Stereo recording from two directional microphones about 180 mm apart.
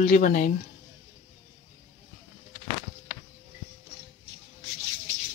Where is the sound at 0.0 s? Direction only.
45° left (ahead or behind).